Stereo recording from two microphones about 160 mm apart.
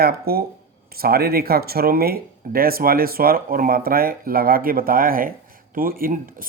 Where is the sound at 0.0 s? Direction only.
70° right (ahead or behind).